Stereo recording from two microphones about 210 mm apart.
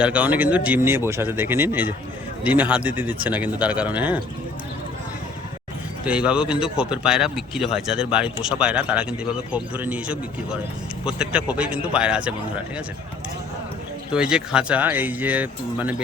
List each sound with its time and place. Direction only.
0.0 s speech: 5° right (ahead or behind)
6.1 s speech: 5° right (ahead or behind)
14.1 s speech: 5° right (ahead or behind)